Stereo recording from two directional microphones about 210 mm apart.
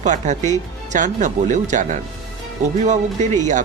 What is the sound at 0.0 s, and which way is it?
Speech, 35° right (ahead or behind).